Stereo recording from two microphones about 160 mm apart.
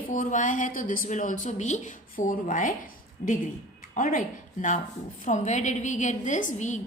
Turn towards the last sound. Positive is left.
turn(degrees=50)  # may be behind; listen again after turning